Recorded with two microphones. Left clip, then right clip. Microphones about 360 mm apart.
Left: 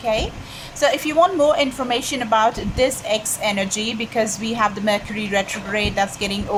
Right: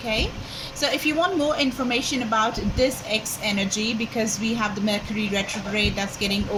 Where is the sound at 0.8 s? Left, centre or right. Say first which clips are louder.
Left 6 dB; centre.